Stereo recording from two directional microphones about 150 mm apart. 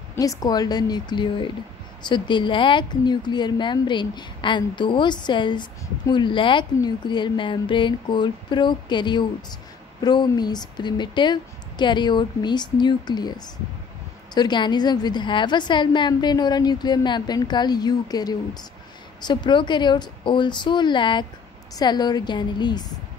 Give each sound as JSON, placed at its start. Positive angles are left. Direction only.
{"t": 0.1, "sound": "a woman's voice", "side_deg": 25}
{"t": 14.3, "sound": "a woman's voice", "side_deg": 30}